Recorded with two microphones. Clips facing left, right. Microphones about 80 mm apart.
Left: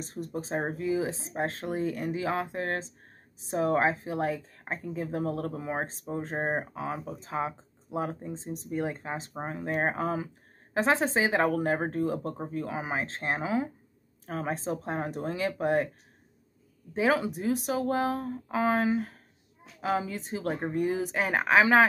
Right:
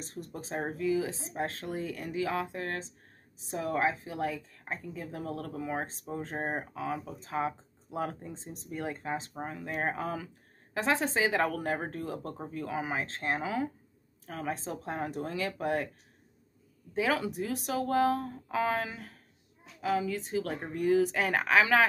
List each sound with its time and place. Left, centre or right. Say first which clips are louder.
0.0 s a woman's voice: left 6 dB; centre
14.2 s speech: left 4 dB; left
16.9 s a woman's voice: left 4 dB; left